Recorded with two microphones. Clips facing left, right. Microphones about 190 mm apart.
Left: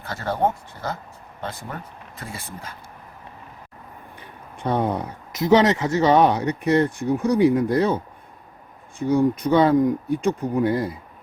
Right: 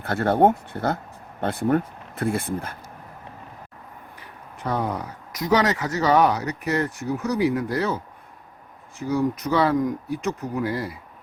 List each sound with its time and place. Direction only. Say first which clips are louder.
0.0 s speech: right 5 dB; 55° right (ahead or behind)
4.2 s speech: left 3 dB; 30° left (ahead or behind)